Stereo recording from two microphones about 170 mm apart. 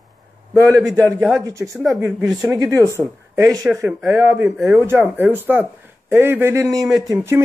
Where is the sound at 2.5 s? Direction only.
20° right (ahead or behind).